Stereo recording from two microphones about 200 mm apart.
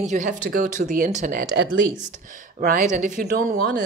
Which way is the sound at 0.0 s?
40° right (ahead or behind).